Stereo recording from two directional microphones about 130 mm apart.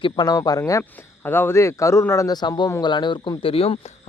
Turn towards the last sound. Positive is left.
turn(degrees=45)  # may be behind; listen again after turning